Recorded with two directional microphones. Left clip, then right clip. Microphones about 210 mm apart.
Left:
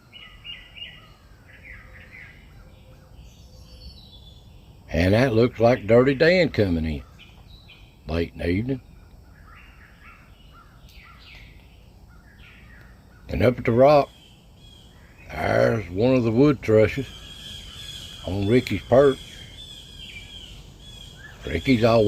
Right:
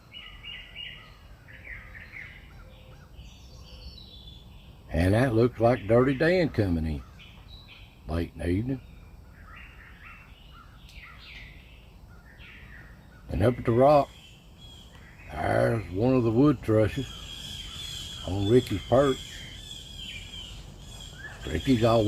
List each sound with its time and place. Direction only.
4.9 s speech: 30° left (ahead or behind)
8.0 s speech: 30° left (ahead or behind)
13.2 s speech: 30° left (ahead or behind)
15.3 s speech: 30° left (ahead or behind)
18.5 s speech: 35° left (ahead or behind)
21.8 s speech: 30° left (ahead or behind)